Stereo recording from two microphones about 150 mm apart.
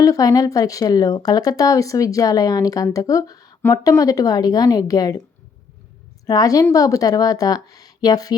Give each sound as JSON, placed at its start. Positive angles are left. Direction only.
{"t": 0.0, "sound": "speech", "side_deg": 25}
{"t": 6.2, "sound": "speech", "side_deg": 25}